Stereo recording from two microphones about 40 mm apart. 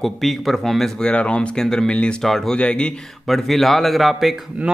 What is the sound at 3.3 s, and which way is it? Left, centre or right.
Speech, centre.